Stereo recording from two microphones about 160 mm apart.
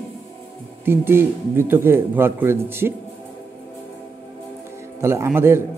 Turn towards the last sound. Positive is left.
turn(degrees=-15)  # may be behind; listen again after turning